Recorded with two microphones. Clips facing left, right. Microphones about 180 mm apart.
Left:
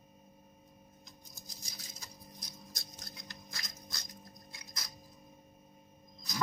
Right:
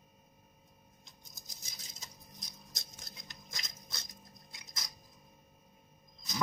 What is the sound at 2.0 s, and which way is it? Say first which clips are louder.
Patter: left 2 dB; 20° right (ahead or behind).